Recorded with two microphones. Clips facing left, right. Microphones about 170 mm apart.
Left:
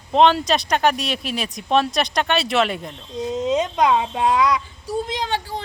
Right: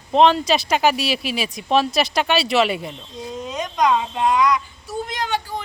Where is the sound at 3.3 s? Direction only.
25° left (ahead or behind).